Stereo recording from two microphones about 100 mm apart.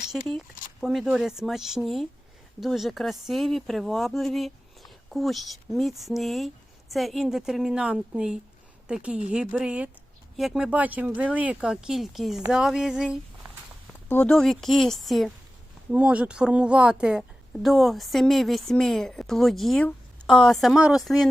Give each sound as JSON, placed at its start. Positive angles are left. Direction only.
{"t": 0.1, "sound": "a woman's voice", "side_deg": 0}
{"t": 14.3, "sound": "a woman's voice", "side_deg": 5}
{"t": 15.9, "sound": "a woman's voice", "side_deg": -10}